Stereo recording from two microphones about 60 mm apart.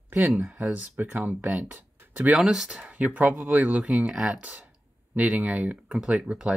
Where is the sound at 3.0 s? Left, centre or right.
Right.